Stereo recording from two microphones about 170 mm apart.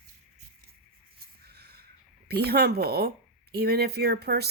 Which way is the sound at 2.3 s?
70° right (ahead or behind).